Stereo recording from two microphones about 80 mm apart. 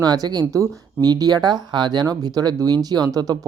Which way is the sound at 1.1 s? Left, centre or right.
Right.